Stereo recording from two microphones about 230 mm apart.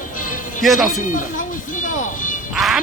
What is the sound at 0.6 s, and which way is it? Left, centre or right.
Speech, centre.